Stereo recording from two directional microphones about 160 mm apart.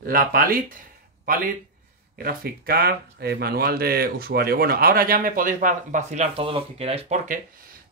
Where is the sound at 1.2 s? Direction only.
60° right (ahead or behind).